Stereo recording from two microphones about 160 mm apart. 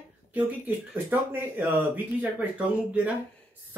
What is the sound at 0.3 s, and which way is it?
Speech, 10° right (ahead or behind).